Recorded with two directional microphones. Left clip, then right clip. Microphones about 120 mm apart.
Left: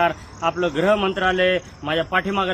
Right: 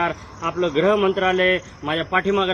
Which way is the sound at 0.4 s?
55° left (ahead or behind).